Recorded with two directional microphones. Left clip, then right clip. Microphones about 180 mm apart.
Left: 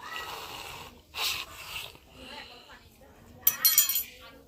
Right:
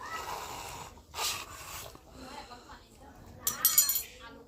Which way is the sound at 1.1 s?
5° right (ahead or behind).